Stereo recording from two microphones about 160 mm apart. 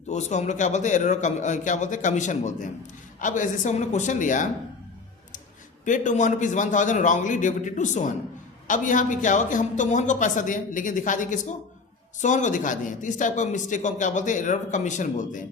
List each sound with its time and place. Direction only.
0.1 s speech: 45° left (ahead or behind)
5.8 s speech: 50° left (ahead or behind)